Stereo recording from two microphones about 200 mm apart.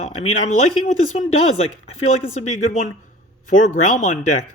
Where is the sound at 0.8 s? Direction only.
35° left (ahead or behind).